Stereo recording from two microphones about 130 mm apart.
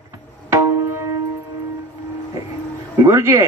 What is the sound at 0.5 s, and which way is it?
Tabla, 20° right (ahead or behind).